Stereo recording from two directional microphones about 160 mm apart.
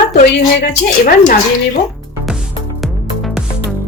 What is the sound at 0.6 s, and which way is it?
Speech, 90° left.